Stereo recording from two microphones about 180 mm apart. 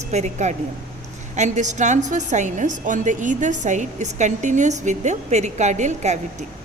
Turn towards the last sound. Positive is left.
turn(degrees=-40)  # may be behind; listen again after turning